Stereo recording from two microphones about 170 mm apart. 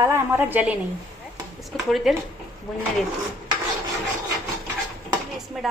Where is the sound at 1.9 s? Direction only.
Centre (ahead or behind).